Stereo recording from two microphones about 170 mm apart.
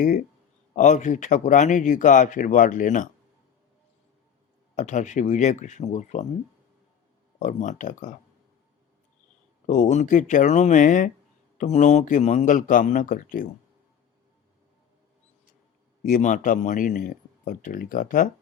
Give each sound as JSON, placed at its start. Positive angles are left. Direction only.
{"t": 0.0, "sound": "speech", "side_deg": 50}
{"t": 4.8, "sound": "speech", "side_deg": 45}
{"t": 7.3, "sound": "speech", "side_deg": 45}
{"t": 9.6, "sound": "speech", "side_deg": 45}
{"t": 16.0, "sound": "speech", "side_deg": 50}